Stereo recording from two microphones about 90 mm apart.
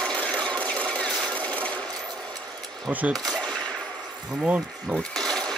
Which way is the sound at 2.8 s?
15° right (ahead or behind).